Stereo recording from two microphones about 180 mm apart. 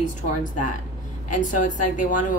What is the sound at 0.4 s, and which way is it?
A woman's voice, 45° left (ahead or behind).